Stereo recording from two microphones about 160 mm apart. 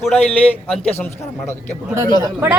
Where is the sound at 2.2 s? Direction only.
15° right (ahead or behind).